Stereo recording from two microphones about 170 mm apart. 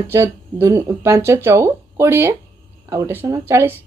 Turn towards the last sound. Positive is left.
turn(degrees=-15)  # may be behind; listen again after turning